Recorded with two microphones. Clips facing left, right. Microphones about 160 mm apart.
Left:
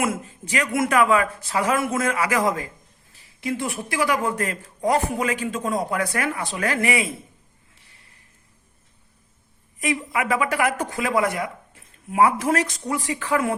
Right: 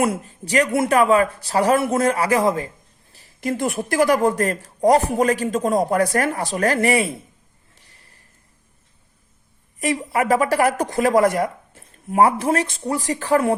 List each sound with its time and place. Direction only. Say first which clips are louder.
0.0 s speech: right 4 dB; 35° right (ahead or behind)
3.1 s speech: right 3 dB; 40° right (ahead or behind)
9.8 s speech: right 4 dB; 35° right (ahead or behind)